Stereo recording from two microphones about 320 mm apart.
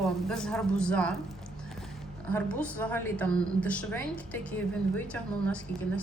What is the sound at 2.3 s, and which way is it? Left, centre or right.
A woman's voice, centre.